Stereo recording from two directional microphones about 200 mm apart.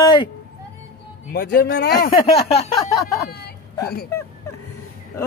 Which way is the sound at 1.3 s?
50° left (ahead or behind).